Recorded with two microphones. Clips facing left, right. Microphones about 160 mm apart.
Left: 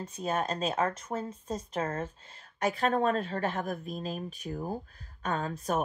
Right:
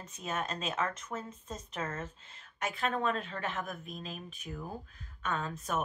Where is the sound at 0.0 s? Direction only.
35° left (ahead or behind).